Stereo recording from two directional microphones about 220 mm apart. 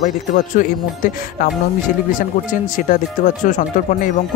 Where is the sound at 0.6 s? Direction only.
40° left (ahead or behind).